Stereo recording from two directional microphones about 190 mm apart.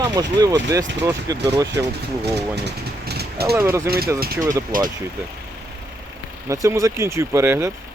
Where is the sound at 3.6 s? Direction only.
15° right (ahead or behind).